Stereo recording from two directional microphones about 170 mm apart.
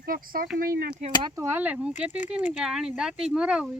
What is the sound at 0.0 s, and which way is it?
Speech, 60° right (ahead or behind).